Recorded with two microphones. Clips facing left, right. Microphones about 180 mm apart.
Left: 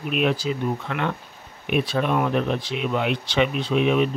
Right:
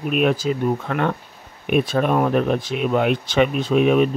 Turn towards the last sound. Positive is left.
turn(degrees=-45)  # may be behind; listen again after turning